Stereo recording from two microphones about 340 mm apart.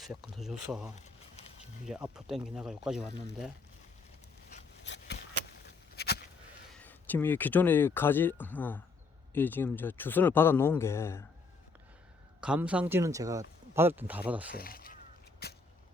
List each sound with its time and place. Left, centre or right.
0.3 s speech: centre
4.8 s a sound: left
6.7 s speech: centre
12.4 s speech: centre
14.5 s speech: left
15.4 s a sound: left